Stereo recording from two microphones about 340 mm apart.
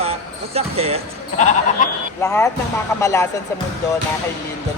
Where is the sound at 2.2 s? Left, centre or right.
Centre.